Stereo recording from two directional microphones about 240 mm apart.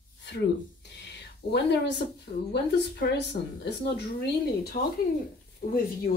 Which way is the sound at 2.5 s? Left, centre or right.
Left.